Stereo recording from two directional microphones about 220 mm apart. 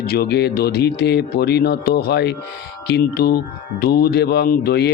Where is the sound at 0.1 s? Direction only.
45° left (ahead or behind).